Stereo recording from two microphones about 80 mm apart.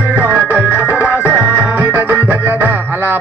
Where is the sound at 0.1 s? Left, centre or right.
Centre.